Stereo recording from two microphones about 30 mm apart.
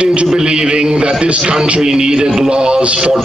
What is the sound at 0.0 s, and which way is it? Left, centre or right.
Speech, right.